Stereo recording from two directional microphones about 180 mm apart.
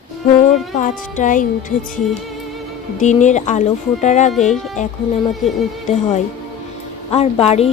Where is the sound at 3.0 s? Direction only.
40° left (ahead or behind).